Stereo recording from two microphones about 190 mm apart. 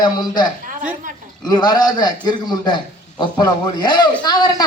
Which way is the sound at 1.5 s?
20° left (ahead or behind).